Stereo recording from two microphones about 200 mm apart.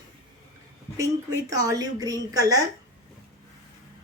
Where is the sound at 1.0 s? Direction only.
15° right (ahead or behind).